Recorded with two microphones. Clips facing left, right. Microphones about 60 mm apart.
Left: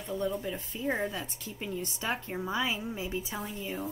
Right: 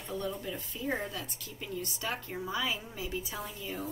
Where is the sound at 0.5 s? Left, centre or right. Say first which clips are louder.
Left 2 dB; centre.